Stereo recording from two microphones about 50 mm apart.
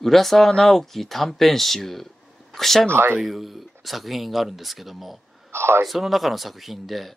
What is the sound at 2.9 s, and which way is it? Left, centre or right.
Speech, right.